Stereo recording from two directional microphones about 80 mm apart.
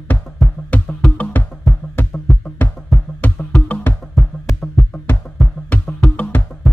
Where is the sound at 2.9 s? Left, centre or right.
Centre.